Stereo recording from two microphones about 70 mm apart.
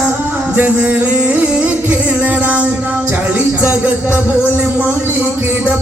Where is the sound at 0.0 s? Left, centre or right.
Right.